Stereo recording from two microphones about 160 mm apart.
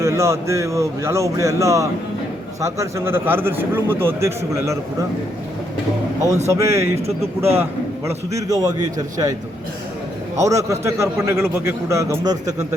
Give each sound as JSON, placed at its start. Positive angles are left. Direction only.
{"t": 0.0, "sound": "a man's voice", "side_deg": -15}
{"t": 6.5, "sound": "a man's voice", "side_deg": -20}
{"t": 10.3, "sound": "a man's voice", "side_deg": -20}